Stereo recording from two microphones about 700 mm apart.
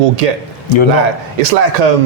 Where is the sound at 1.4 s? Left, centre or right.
Right.